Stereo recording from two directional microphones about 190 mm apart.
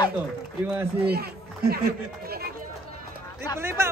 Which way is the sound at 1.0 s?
55° right (ahead or behind).